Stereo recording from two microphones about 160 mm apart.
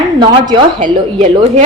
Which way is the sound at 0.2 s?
30° right (ahead or behind).